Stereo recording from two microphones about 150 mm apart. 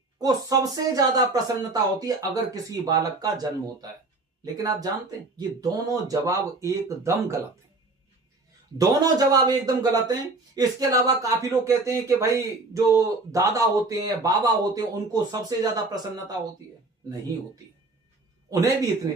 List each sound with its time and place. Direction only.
0.2 s speech: 25° right (ahead or behind)
8.8 s speech: 25° right (ahead or behind)
18.5 s speech: 20° right (ahead or behind)